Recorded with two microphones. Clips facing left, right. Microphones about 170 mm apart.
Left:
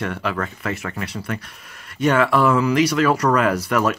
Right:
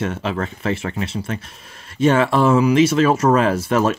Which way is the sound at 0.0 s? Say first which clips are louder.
Right 2 dB; 25° right (ahead or behind).